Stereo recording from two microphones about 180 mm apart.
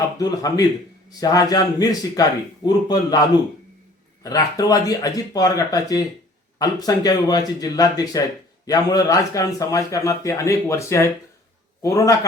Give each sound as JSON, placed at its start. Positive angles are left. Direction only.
{"t": 0.2, "sound": "a man's voice", "side_deg": 20}